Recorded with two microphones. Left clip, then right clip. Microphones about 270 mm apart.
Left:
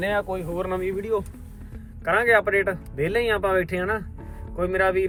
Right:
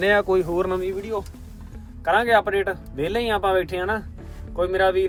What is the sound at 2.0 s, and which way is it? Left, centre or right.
Speech, centre.